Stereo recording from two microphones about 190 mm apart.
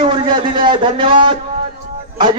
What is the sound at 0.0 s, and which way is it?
A man's voice, 25° right (ahead or behind).